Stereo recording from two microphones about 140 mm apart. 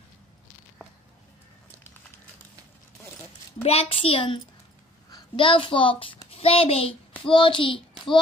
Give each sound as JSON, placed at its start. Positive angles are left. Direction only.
{"t": 3.6, "sound": "a woman's voice", "side_deg": 45}